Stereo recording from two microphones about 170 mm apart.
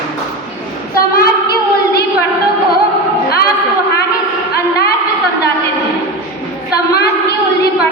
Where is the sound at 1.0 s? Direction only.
60° left (ahead or behind).